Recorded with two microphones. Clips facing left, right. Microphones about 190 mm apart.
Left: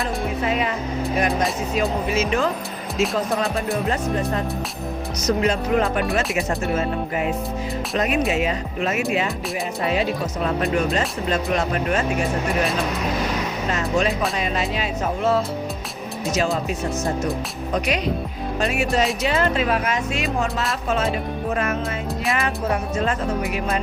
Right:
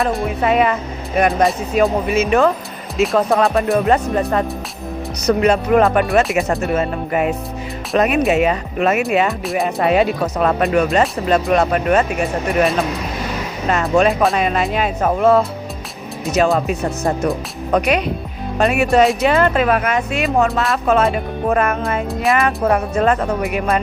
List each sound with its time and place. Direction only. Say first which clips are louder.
0.4 s speech: right 9 dB; 65° right (ahead or behind)
5.2 s speech: right 6 dB; 65° right (ahead or behind)
13.7 s speech: right 8 dB; 60° right (ahead or behind)